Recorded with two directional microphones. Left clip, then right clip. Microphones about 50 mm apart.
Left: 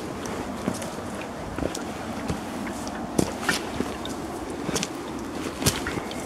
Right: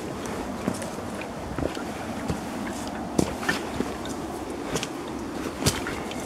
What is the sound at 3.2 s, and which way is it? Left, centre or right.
Walk, centre.